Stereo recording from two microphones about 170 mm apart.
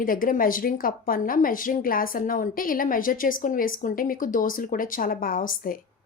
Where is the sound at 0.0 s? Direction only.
55° left (ahead or behind).